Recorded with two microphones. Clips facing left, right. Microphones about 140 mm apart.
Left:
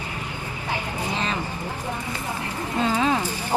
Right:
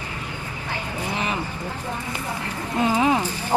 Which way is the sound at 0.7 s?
15° left (ahead or behind).